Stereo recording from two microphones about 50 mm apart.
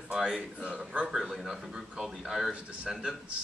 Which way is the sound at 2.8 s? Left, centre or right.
Centre.